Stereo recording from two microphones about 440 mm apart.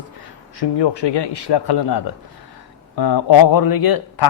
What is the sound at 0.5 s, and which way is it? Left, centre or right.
Speech, left.